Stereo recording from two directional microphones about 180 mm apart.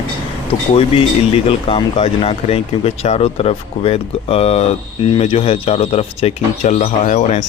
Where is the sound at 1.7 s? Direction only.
30° left (ahead or behind).